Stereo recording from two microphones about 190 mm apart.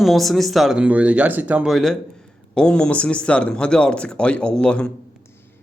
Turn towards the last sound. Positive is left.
turn(degrees=5)  # may be behind; listen again after turning